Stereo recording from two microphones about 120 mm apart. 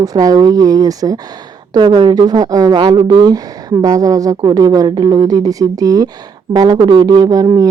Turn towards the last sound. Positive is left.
turn(degrees=-30)  # may be behind; listen again after turning